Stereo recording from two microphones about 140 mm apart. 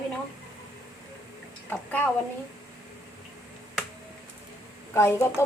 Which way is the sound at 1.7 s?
15° left (ahead or behind).